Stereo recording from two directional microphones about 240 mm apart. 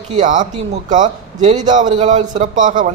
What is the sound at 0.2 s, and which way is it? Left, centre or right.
A man's voice, right.